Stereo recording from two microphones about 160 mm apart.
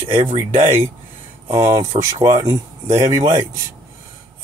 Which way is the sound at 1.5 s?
20° right (ahead or behind).